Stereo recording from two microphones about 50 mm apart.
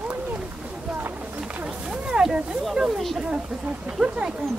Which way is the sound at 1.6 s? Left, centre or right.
Right.